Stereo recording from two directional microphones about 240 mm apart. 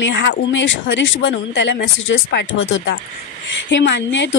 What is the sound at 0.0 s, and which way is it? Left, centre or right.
A woman's voice, left.